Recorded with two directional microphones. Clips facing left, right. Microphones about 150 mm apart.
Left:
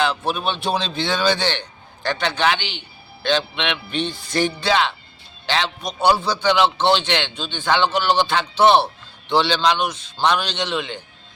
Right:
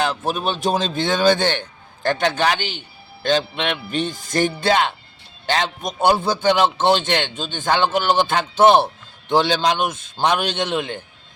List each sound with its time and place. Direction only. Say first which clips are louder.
0.3 s a man's voice: right 1 dB; 45° right (ahead or behind)